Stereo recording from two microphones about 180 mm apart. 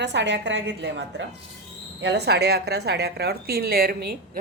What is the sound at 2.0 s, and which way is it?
A woman's voice, 70° right (ahead or behind).